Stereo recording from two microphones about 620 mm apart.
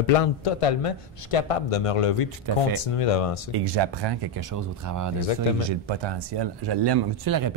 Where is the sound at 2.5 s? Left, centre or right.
Right.